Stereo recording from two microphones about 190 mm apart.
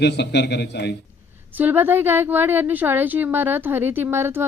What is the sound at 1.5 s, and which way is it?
Speech, 10° right (ahead or behind).